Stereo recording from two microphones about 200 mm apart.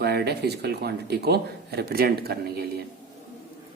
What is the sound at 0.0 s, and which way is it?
Speech, 55° right (ahead or behind).